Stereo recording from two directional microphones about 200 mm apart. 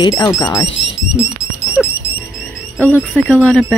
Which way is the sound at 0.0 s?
20° left (ahead or behind).